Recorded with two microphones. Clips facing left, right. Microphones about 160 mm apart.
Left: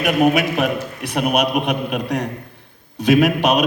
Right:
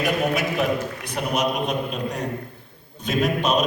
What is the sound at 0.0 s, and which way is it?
A man's voice, 70° left (ahead or behind).